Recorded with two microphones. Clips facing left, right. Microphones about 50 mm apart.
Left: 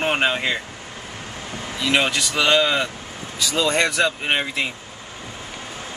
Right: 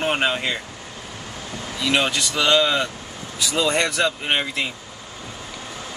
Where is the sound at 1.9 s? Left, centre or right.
Left.